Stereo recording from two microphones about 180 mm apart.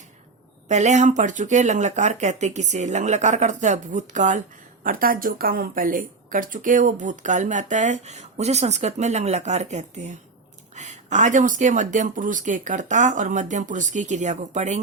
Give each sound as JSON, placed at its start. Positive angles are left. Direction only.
{"t": 0.7, "sound": "speech", "side_deg": -40}